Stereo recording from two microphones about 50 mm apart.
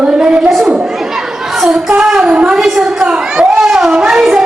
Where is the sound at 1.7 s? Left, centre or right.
Centre.